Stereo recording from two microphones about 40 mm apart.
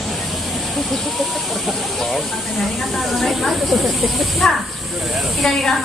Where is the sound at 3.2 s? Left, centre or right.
Centre.